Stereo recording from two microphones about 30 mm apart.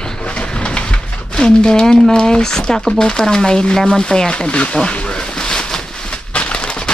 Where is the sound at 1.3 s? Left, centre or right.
Left.